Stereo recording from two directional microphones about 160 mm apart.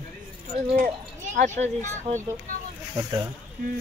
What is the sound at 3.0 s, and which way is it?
Speech, 25° right (ahead or behind).